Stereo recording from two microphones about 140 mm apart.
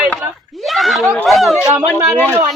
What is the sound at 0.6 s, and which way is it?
Speech, centre (ahead or behind).